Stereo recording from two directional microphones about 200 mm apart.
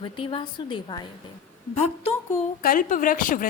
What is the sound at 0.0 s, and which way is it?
A woman's voice, 25° left (ahead or behind).